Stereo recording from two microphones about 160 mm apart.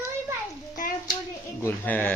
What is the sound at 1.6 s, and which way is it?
Speech, 10° left (ahead or behind).